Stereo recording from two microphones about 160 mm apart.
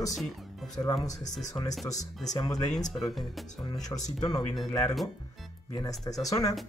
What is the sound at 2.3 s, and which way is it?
Speech, 25° left (ahead or behind).